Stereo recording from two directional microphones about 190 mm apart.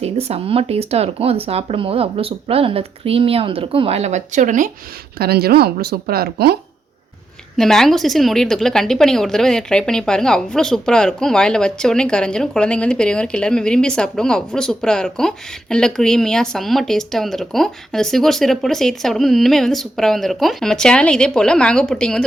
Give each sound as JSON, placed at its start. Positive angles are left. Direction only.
{"t": 0.0, "sound": "speech", "side_deg": -35}
{"t": 5.1, "sound": "a woman's voice", "side_deg": -55}
{"t": 7.5, "sound": "a woman's voice", "side_deg": 0}